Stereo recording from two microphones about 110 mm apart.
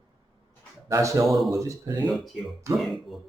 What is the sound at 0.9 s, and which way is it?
Speech, 25° right (ahead or behind).